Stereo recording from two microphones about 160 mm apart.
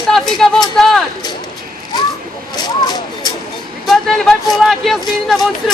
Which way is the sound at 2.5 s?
25° left (ahead or behind).